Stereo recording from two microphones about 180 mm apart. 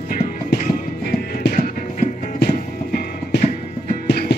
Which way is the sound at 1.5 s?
40° left (ahead or behind).